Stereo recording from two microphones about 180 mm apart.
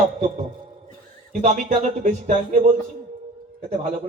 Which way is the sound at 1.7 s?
40° right (ahead or behind).